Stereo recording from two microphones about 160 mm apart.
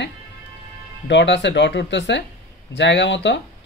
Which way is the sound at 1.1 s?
90° left.